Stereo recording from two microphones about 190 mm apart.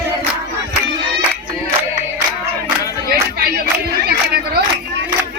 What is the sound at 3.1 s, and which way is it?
Chatter, 55° right (ahead or behind).